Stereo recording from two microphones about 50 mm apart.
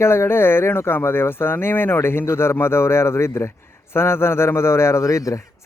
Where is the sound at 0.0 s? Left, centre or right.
Left.